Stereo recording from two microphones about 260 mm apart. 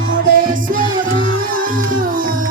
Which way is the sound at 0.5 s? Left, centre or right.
Right.